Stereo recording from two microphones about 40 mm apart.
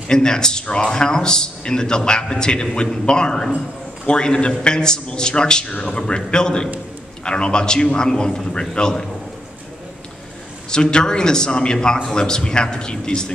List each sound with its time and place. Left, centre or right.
0.1 s a man's voice: centre
5.7 s a man's voice: left
5.9 s a man's voice: left
10.7 s a man's voice: left